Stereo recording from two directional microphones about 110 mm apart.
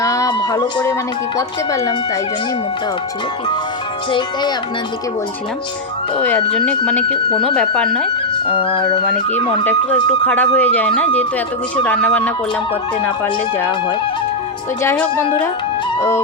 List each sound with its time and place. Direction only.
0.0 s a sound: 30° left (ahead or behind)
0.5 s speech: 35° left (ahead or behind)
6.1 s speech: 15° left (ahead or behind)
8.7 s music: 45° left (ahead or behind)
10.1 s speech: 15° left (ahead or behind)
16.0 s music: 25° left (ahead or behind)